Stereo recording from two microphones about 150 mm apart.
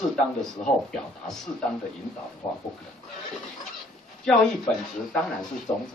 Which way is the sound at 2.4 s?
30° left (ahead or behind).